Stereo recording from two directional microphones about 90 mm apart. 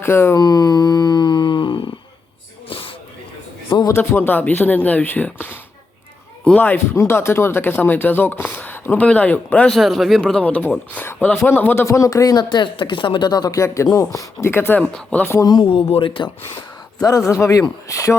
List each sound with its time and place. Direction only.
0.0 s speech: 25° left (ahead or behind)
0.3 s a sound: 45° left (ahead or behind); by 1.9 s 65° left (ahead or behind)
2.6 s a sound: 85° left
3.9 s speech: 25° left (ahead or behind)
6.9 s speech: 30° left (ahead or behind); by 9.7 s 15° left (ahead or behind)
9.7 s speech: centre (ahead or behind); by 14.8 s 25° left (ahead or behind)
14.8 s speech: 10° left (ahead or behind)
15.6 s speech: 90° left; by 16.6 s 65° left (ahead or behind)
17.0 s speech: 40° left (ahead or behind)